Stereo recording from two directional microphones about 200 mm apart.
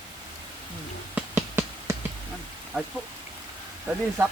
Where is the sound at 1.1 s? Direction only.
10° right (ahead or behind).